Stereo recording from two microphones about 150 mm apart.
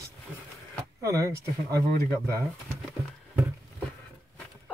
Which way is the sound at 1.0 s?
20° right (ahead or behind).